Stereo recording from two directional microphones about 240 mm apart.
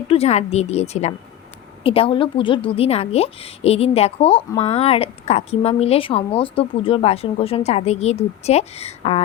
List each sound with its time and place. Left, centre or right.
0.1 s a woman's voice: left